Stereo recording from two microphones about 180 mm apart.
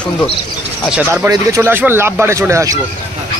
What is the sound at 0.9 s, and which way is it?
Speech, 5° right (ahead or behind).